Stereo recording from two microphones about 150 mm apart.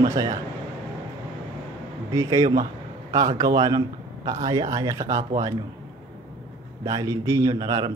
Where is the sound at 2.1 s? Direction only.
25° right (ahead or behind).